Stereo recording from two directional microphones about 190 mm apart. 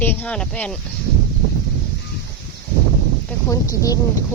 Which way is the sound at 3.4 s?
15° left (ahead or behind).